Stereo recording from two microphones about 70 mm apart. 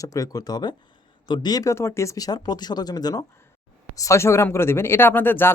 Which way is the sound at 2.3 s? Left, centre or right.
Left.